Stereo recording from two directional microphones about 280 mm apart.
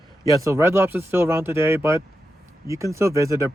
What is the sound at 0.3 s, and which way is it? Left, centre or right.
A man's voice, centre.